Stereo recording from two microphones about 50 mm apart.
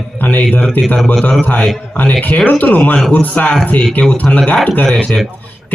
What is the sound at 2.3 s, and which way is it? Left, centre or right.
Speech, left.